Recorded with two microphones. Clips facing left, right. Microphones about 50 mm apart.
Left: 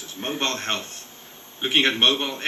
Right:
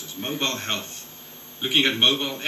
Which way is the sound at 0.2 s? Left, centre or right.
Left.